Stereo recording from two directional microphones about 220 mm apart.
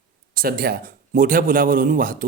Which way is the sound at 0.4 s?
45° right (ahead or behind).